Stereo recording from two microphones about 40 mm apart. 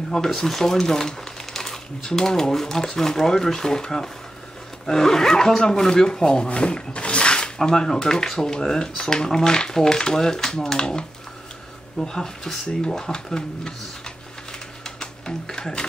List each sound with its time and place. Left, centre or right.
0.3 s speech: centre
15.0 s music: centre